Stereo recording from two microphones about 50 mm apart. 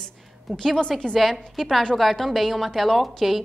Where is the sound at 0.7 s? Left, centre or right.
Centre.